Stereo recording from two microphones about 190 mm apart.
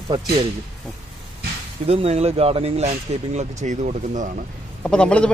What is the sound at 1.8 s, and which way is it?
Speech, 35° right (ahead or behind).